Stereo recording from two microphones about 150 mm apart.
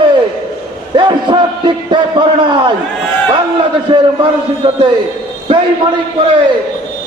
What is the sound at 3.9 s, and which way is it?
Speech, 35° right (ahead or behind).